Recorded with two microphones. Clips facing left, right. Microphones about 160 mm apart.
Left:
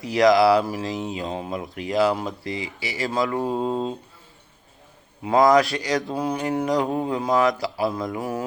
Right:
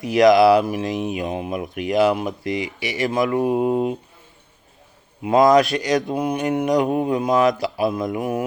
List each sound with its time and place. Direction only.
0.0 s mantra: 20° right (ahead or behind)
5.2 s mantra: 20° right (ahead or behind)